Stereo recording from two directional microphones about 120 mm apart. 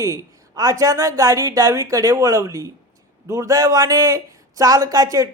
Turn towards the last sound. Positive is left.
turn(degrees=-30)  # may be behind; listen again after turning